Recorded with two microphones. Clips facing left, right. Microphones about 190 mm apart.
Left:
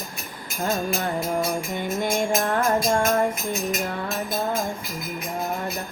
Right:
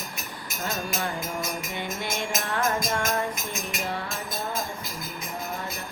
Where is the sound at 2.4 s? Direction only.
45° left (ahead or behind).